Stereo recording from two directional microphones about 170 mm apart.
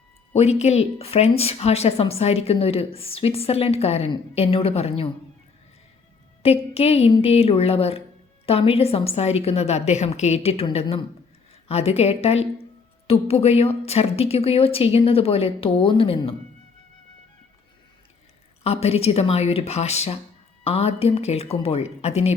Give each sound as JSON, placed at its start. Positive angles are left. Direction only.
{"t": 0.3, "sound": "a woman's voice", "side_deg": 40}
{"t": 6.4, "sound": "a woman's voice", "side_deg": 35}
{"t": 18.6, "sound": "a woman's voice", "side_deg": 35}